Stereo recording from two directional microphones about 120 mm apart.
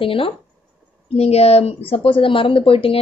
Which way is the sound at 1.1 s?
60° left (ahead or behind).